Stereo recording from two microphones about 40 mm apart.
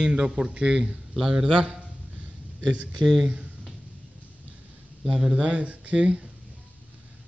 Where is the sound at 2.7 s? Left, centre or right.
Right.